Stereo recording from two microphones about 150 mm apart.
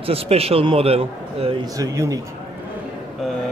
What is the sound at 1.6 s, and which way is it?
Mantra, 20° right (ahead or behind).